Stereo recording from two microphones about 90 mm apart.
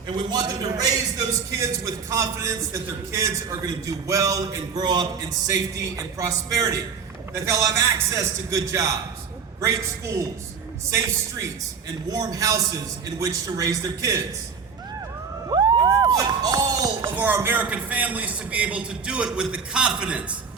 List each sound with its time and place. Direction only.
0.2 s a man's voice: 50° right (ahead or behind)
1.5 s a man's voice: 35° right (ahead or behind)
5.5 s a man's voice: 35° right (ahead or behind)
15.4 s a sound: 45° right (ahead or behind)
17.3 s a man's voice: 25° right (ahead or behind)